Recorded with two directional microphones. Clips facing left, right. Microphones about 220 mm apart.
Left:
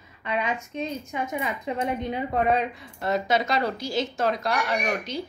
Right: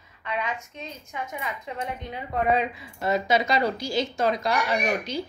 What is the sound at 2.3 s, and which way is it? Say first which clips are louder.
Speech: right 1 dB; centre (ahead or behind).